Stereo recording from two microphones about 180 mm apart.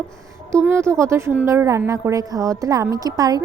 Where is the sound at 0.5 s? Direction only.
15° right (ahead or behind).